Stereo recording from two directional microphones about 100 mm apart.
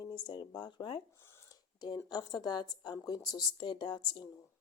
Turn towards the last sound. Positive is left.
turn(degrees=50)  # may be behind; listen again after turning